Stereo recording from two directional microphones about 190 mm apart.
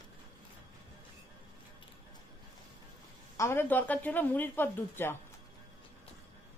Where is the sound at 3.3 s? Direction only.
15° left (ahead or behind).